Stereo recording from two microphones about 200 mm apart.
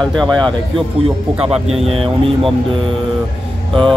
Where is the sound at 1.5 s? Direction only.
30° right (ahead or behind).